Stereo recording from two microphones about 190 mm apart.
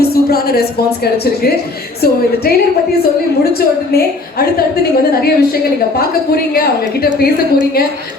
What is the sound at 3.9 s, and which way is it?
A woman's voice, 55° left (ahead or behind).